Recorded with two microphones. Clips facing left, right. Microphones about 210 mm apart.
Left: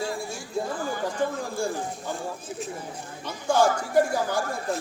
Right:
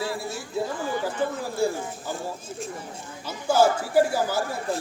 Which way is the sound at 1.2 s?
5° right (ahead or behind).